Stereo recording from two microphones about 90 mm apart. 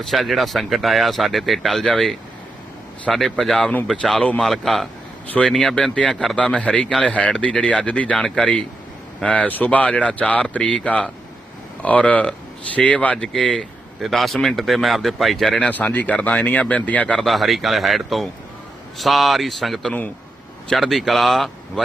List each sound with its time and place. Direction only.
0.0 s a man's voice: centre (ahead or behind)
15.7 s a man's voice: 20° left (ahead or behind)
17.2 s speech: centre (ahead or behind)